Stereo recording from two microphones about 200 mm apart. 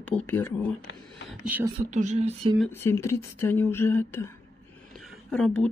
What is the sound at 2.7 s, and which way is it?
A woman's voice, 10° left (ahead or behind).